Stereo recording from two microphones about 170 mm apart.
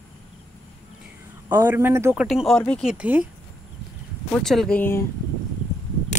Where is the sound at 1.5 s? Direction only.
15° right (ahead or behind).